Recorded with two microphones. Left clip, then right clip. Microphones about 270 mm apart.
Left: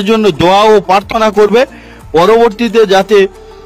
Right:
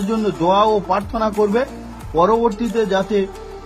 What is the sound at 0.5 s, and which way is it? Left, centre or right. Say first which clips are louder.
Speech: left 8 dB; left.